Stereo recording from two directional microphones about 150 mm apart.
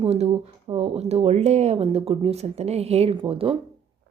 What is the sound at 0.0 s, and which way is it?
A woman's voice, 45° right (ahead or behind).